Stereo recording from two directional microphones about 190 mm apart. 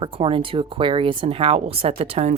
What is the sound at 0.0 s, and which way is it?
Speech, 30° right (ahead or behind).